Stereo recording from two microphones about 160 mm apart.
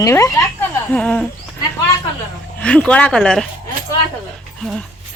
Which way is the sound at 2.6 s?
5° left (ahead or behind).